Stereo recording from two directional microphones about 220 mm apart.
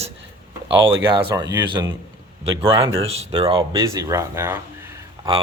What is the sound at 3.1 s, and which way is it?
Speech, 30° right (ahead or behind).